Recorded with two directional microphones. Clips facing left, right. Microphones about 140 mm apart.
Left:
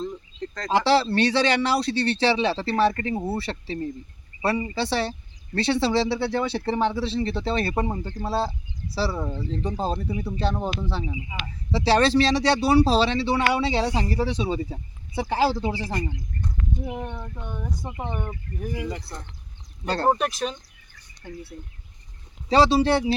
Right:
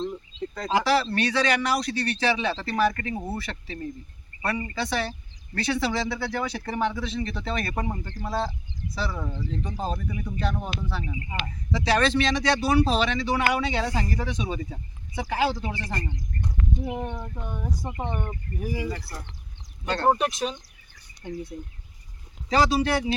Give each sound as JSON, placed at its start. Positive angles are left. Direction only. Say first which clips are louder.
{"t": 0.4, "sound": "a sound", "louder": "right 1 dB", "side_deg": -10}
{"t": 0.7, "sound": "speech", "louder": "left 3 dB", "side_deg": 30}
{"t": 11.0, "sound": "speech", "louder": "left 3 dB", "side_deg": 10}
{"t": 11.7, "sound": "speech", "louder": "left 4 dB", "side_deg": 30}
{"t": 16.8, "sound": "speech", "louder": "right 1 dB", "side_deg": -5}
{"t": 20.1, "sound": "a sound", "louder": "right 1 dB", "side_deg": 0}
{"t": 22.4, "sound": "speech", "louder": "left 4 dB", "side_deg": 30}